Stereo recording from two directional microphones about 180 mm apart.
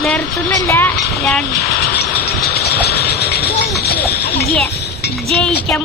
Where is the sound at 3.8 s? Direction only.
65° left (ahead or behind).